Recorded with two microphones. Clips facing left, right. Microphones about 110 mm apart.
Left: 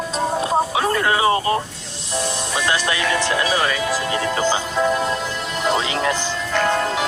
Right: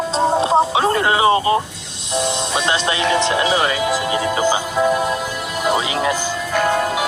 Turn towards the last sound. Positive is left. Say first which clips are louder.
# right 2 dB
turn(degrees=-10)  # may be behind; listen again after turning